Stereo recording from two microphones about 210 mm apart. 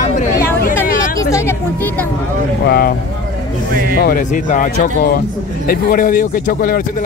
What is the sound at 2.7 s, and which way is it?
Speech, 45° left (ahead or behind).